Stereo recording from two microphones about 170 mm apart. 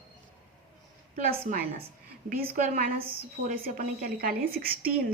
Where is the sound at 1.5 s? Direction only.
50° right (ahead or behind).